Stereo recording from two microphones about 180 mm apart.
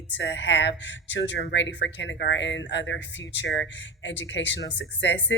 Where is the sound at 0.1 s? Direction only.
80° left.